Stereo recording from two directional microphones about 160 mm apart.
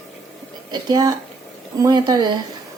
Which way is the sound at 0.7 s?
25° right (ahead or behind).